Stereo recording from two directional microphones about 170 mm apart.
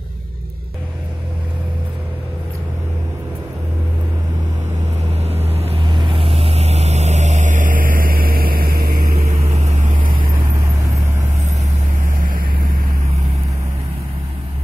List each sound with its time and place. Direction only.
5.5 s vehicle: 35° right (ahead or behind); by 9.1 s 60° right (ahead or behind)
9.1 s vehicle: 40° right (ahead or behind)